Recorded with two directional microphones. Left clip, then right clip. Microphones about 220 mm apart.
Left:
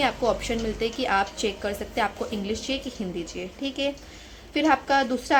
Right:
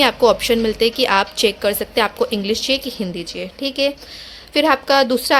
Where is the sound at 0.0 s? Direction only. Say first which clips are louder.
Right 10 dB; 45° right (ahead or behind).